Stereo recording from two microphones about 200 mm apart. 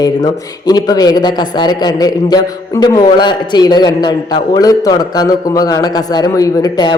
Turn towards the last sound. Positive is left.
turn(degrees=20)  # may be behind; listen again after turning